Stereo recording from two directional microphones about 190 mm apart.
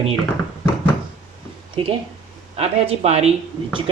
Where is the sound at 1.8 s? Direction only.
30° right (ahead or behind).